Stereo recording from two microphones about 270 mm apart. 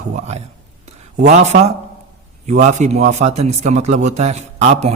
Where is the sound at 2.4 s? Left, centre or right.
Right.